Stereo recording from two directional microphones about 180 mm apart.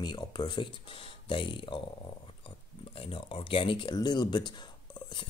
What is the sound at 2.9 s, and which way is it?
Speech, 30° left (ahead or behind).